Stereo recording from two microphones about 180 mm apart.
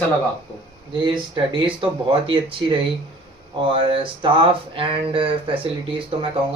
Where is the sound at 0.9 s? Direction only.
25° right (ahead or behind).